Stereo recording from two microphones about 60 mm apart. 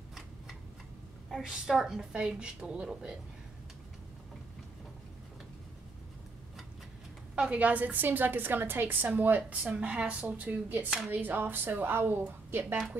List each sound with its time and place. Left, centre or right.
1.4 s a woman's voice: centre
7.3 s a woman's voice: right
9.5 s a woman's voice: centre; by 13.1 s right